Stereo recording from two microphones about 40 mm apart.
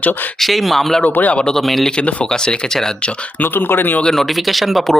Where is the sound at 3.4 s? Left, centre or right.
Left.